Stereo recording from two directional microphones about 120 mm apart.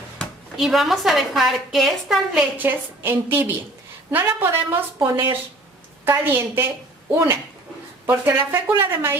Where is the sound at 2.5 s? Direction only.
15° right (ahead or behind).